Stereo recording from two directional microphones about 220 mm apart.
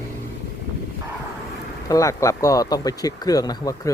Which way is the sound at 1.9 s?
15° left (ahead or behind).